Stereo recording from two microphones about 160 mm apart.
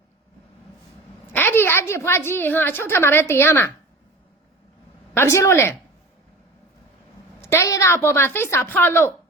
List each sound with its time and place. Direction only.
1.3 s a woman's voice: 15° left (ahead or behind)
5.1 s a woman's voice: 15° left (ahead or behind)
7.4 s a woman's voice: 15° left (ahead or behind)